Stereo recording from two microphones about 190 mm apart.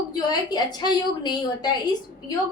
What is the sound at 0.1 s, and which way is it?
A woman's voice, 20° left (ahead or behind).